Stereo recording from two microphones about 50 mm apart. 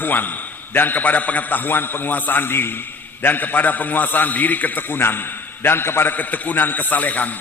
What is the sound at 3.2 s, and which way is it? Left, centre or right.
A man's voice, left.